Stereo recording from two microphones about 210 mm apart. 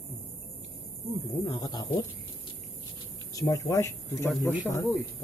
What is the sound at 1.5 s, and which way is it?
Speech, 20° left (ahead or behind).